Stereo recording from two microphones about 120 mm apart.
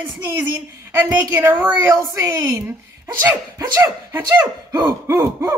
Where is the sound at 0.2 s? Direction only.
15° right (ahead or behind).